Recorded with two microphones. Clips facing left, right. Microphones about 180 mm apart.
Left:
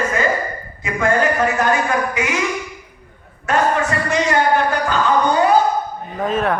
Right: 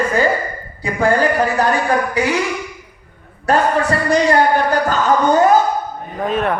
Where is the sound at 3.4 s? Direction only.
35° right (ahead or behind).